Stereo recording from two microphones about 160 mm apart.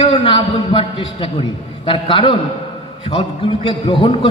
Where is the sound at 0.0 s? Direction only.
30° left (ahead or behind).